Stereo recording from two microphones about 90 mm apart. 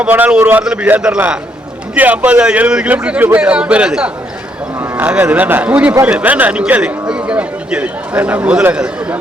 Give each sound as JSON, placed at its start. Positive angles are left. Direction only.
{"t": 0.0, "sound": "a man's voice", "side_deg": -15}
{"t": 0.6, "sound": "a man's voice", "side_deg": -10}